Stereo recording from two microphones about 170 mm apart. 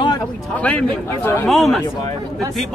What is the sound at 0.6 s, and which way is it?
A man's voice, 10° left (ahead or behind).